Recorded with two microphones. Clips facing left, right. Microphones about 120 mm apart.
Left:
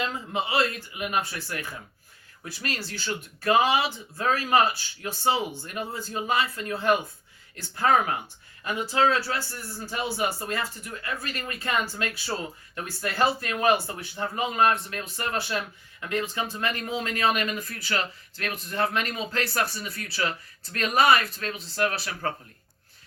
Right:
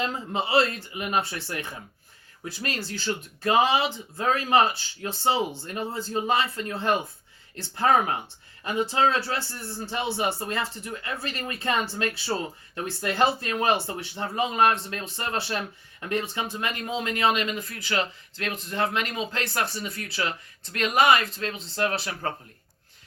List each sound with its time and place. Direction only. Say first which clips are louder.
0.0 s speech: right 1 dB; 35° right (ahead or behind)